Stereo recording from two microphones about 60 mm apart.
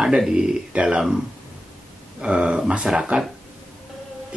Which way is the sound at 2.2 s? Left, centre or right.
Centre.